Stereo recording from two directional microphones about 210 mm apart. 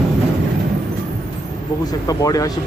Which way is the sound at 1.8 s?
15° left (ahead or behind).